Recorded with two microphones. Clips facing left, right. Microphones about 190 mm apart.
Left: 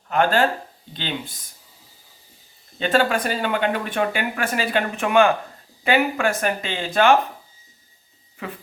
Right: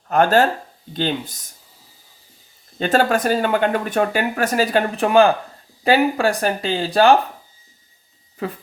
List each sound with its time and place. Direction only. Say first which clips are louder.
0.1 s speech: right 4 dB; 40° right (ahead or behind)
2.7 s speech: right 3 dB; 45° right (ahead or behind)
8.4 s speech: right 6 dB; 35° right (ahead or behind)